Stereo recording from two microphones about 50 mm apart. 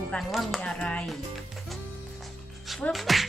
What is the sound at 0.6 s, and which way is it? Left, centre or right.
Speech, left.